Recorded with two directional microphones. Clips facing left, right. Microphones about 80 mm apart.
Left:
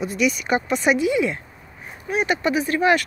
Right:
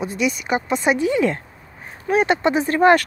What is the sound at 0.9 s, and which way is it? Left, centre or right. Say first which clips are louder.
Speech: right 2 dB; right.